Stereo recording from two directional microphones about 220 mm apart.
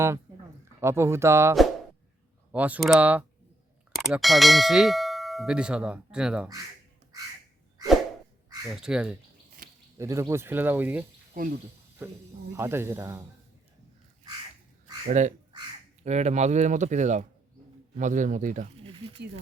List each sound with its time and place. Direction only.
0.8 s speech: 10° right (ahead or behind)
3.9 s clang: centre (ahead or behind)
8.6 s speech: centre (ahead or behind)
9.6 s a sound: 40° right (ahead or behind)
10.0 s speech: 15° right (ahead or behind)
12.5 s speech: 10° right (ahead or behind)
15.0 s speech: 35° right (ahead or behind)